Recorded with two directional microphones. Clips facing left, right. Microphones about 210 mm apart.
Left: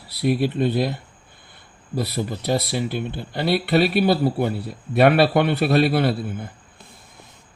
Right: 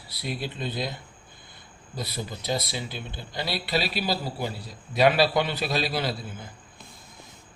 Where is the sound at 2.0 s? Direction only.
60° left (ahead or behind).